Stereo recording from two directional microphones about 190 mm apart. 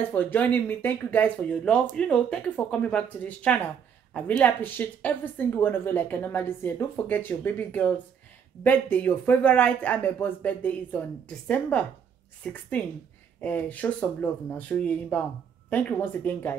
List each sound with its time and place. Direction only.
0.0 s a woman's voice: 10° left (ahead or behind)